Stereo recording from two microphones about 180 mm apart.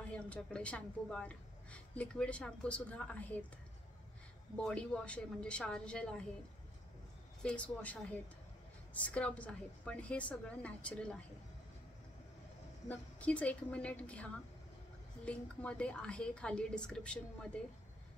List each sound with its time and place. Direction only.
0.1 s a woman's voice: 5° left (ahead or behind)
4.6 s a woman's voice: 5° left (ahead or behind)
7.4 s a woman's voice: 5° left (ahead or behind)
12.8 s a woman's voice: 5° left (ahead or behind)